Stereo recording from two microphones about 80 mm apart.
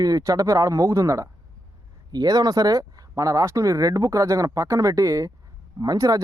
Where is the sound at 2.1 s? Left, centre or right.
Right.